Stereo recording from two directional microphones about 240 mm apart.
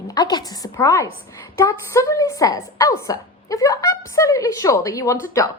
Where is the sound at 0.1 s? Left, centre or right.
Centre.